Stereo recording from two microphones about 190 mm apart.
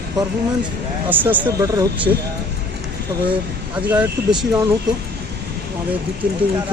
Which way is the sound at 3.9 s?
10° right (ahead or behind).